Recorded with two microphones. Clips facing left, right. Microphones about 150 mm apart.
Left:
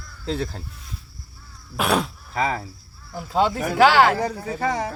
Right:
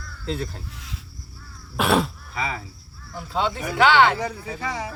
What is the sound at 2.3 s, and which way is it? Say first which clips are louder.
Speech: left 6 dB; 45° left (ahead or behind).